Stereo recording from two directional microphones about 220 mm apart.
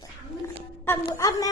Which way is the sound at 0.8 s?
15° left (ahead or behind).